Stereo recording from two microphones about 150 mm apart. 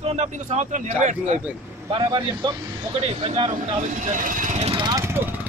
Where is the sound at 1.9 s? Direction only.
30° right (ahead or behind).